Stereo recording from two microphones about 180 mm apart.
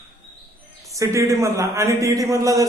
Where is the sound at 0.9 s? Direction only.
15° right (ahead or behind).